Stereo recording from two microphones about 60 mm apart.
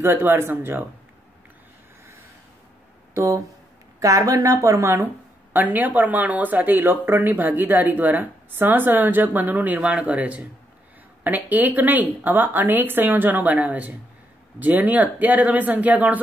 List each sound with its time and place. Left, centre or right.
0.0 s speech: right
3.2 s speech: right
5.5 s speech: right